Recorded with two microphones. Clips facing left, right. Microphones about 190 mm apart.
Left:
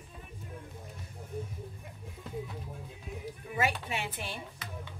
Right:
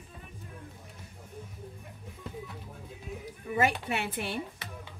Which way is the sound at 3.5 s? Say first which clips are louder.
Right 4 dB; 60° right (ahead or behind).